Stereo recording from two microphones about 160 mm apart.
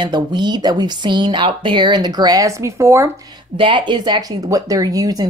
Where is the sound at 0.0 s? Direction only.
25° right (ahead or behind).